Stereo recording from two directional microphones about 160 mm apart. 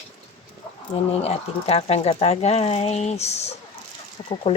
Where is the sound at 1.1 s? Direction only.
40° left (ahead or behind).